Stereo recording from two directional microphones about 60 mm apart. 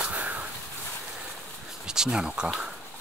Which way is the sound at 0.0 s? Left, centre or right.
Right.